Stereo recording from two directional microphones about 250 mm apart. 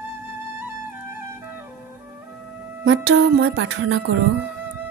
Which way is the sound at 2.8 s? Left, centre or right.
Right.